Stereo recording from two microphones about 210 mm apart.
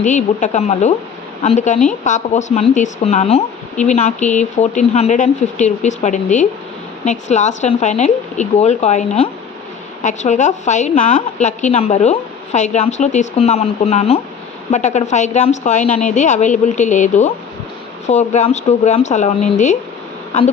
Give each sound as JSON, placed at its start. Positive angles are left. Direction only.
{"t": 0.0, "sound": "speech", "side_deg": 35}